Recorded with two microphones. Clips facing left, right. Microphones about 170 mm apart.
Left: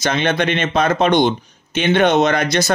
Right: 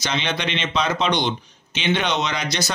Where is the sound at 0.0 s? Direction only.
50° left (ahead or behind).